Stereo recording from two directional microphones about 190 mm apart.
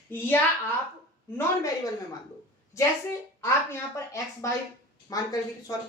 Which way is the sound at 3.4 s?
15° left (ahead or behind).